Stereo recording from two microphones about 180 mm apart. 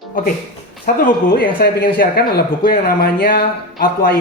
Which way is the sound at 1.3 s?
60° left (ahead or behind).